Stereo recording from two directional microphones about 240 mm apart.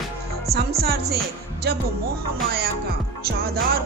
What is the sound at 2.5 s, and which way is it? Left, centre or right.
Music, right.